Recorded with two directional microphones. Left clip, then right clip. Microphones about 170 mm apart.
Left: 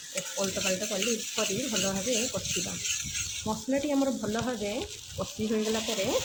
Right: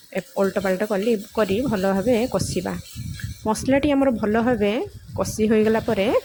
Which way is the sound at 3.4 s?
50° right (ahead or behind).